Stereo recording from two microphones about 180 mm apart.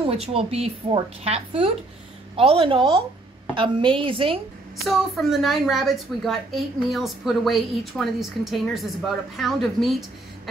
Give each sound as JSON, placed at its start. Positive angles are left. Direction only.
{"t": 0.0, "sound": "a woman's voice", "side_deg": -30}
{"t": 4.8, "sound": "a woman's voice", "side_deg": 0}